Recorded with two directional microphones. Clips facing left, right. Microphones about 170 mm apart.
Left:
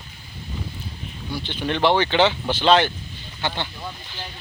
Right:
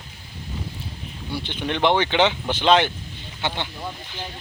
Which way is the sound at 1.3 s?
20° right (ahead or behind).